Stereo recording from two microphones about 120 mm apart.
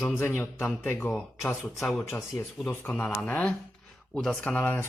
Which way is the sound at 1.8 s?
Centre (ahead or behind).